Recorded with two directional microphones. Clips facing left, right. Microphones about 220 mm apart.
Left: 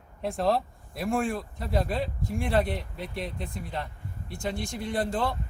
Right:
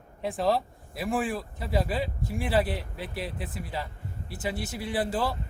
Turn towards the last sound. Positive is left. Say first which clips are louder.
# even
turn(degrees=-5)  # may be behind; listen again after turning